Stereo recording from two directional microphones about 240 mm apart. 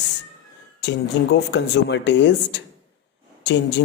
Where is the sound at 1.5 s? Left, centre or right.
Left.